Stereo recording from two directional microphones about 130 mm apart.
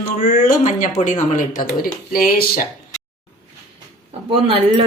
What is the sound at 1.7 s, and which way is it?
Speech, 90° left.